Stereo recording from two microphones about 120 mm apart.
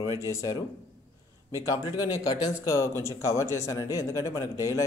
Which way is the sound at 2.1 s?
35° left (ahead or behind).